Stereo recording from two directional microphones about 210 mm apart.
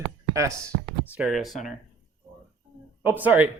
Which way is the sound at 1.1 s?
5° right (ahead or behind).